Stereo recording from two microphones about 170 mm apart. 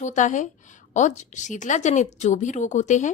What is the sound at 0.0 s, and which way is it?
A woman's voice, 45° left (ahead or behind).